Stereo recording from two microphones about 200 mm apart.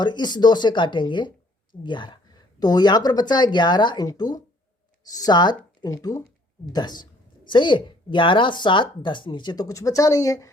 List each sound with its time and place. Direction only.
0.0 s a woman's voice: 20° left (ahead or behind)